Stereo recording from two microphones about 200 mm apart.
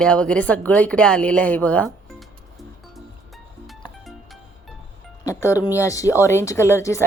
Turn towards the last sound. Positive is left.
turn(degrees=15)  # may be behind; listen again after turning